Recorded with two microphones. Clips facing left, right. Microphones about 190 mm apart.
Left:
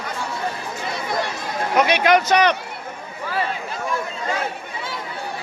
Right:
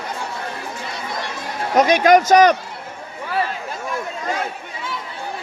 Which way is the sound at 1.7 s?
40° right (ahead or behind).